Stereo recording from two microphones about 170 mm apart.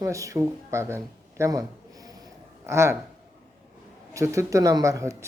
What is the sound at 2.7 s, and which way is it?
Speech, 15° right (ahead or behind).